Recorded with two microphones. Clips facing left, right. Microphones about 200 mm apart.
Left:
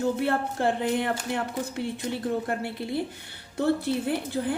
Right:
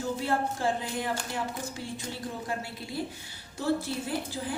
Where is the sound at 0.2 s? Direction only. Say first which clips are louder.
Left 3 dB; 60° left (ahead or behind).